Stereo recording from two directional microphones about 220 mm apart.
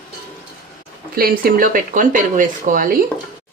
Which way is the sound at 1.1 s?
40° right (ahead or behind).